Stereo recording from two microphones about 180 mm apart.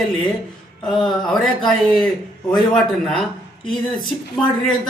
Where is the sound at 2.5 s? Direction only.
Centre (ahead or behind).